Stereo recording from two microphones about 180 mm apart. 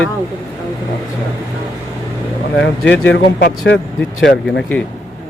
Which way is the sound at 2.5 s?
90° left.